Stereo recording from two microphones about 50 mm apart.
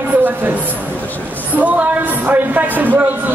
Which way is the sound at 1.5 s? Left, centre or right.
Right.